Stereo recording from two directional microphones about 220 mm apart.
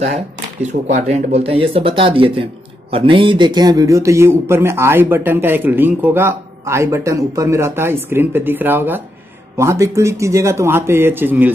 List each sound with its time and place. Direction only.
0.0 s speech: 30° right (ahead or behind); by 11.5 s 10° right (ahead or behind)